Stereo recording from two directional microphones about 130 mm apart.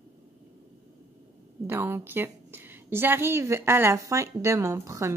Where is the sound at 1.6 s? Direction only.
15° right (ahead or behind).